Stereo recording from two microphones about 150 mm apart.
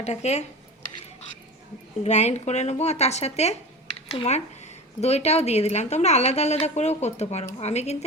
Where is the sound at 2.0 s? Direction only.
50° left (ahead or behind).